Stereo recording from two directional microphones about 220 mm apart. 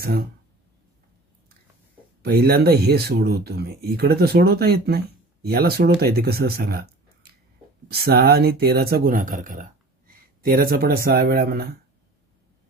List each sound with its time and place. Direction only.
2.2 s speech: 45° right (ahead or behind)